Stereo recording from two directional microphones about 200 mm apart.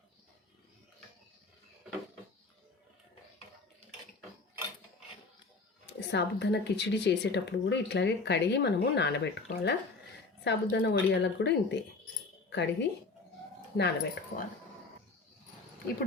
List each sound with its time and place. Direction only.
6.1 s speech: 60° left (ahead or behind)